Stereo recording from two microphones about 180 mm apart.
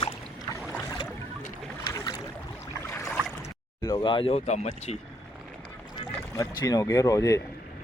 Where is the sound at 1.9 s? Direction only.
25° left (ahead or behind).